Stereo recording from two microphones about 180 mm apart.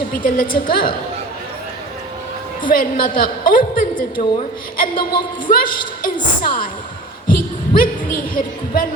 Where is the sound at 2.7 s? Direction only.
50° left (ahead or behind).